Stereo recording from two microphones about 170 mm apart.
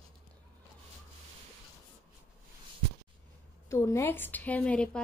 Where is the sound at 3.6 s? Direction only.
15° left (ahead or behind).